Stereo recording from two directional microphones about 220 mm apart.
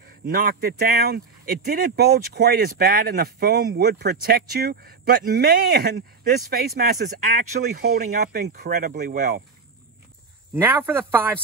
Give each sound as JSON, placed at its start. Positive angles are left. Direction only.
{"t": 0.3, "sound": "speech", "side_deg": -40}
{"t": 10.5, "sound": "a man's voice", "side_deg": -10}